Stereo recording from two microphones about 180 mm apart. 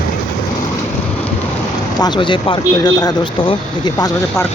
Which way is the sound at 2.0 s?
25° left (ahead or behind).